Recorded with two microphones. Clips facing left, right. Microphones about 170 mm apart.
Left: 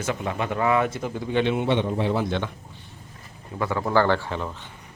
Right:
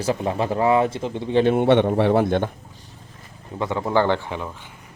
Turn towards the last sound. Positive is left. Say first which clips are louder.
# right 1 dB
turn(degrees=-15)  # may be behind; listen again after turning